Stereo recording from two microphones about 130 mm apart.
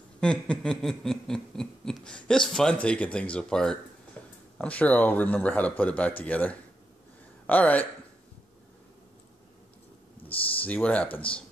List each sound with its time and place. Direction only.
0.2 s a sound: 5° left (ahead or behind)
4.6 s speech: 10° left (ahead or behind)
10.2 s speech: 10° left (ahead or behind)
11.1 s speech: 45° left (ahead or behind)